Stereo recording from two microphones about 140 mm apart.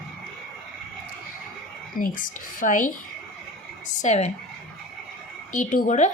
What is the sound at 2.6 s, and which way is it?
Speech, 65° left (ahead or behind).